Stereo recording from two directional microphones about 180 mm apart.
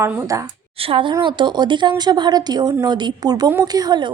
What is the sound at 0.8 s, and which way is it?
A woman's voice, 30° right (ahead or behind).